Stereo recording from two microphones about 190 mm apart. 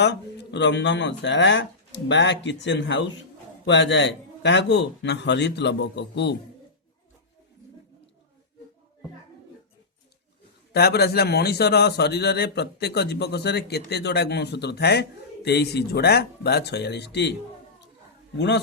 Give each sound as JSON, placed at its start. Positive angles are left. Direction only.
{"t": 0.0, "sound": "a man's voice", "side_deg": 65}
{"t": 10.7, "sound": "a man's voice", "side_deg": 60}
{"t": 18.3, "sound": "a man's voice", "side_deg": 65}